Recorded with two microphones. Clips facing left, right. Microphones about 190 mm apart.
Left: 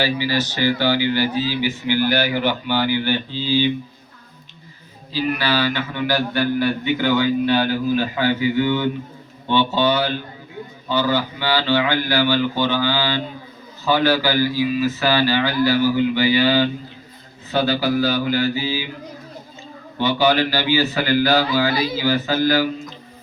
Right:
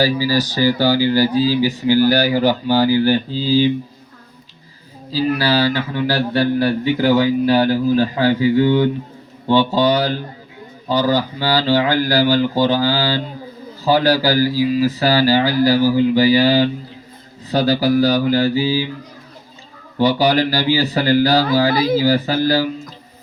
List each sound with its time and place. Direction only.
0.0 s speech: 40° right (ahead or behind)
5.1 s speech: 35° right (ahead or behind)
20.0 s speech: 35° right (ahead or behind)